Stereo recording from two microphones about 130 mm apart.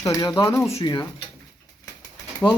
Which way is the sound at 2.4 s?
15° left (ahead or behind).